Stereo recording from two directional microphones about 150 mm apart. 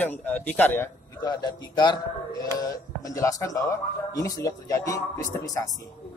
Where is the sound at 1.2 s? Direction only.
25° left (ahead or behind).